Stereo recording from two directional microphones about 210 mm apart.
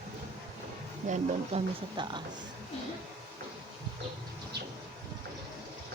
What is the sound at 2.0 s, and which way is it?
Speech, 20° right (ahead or behind).